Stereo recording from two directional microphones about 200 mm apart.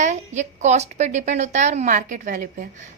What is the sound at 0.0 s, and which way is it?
A woman's voice, 35° right (ahead or behind).